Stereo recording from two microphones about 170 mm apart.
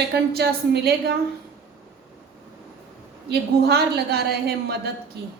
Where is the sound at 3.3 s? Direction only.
70° right (ahead or behind).